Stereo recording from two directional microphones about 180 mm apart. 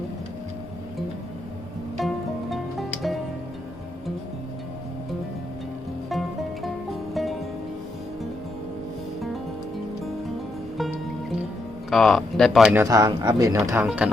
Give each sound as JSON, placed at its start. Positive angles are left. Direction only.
{"t": 2.0, "sound": "music", "side_deg": 0}
{"t": 6.1, "sound": "music", "side_deg": 0}
{"t": 11.9, "sound": "speech", "side_deg": 0}
{"t": 12.7, "sound": "speech", "side_deg": -15}
{"t": 13.8, "sound": "speech", "side_deg": -5}